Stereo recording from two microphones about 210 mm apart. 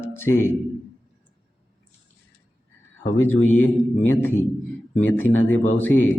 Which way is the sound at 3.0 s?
65° left (ahead or behind).